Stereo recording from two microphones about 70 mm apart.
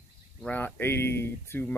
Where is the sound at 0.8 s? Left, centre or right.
Left.